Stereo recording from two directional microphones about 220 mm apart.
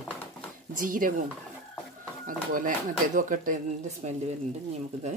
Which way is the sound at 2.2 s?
35° right (ahead or behind).